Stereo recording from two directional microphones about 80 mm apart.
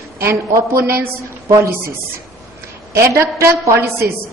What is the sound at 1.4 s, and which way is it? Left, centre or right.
Speech, right.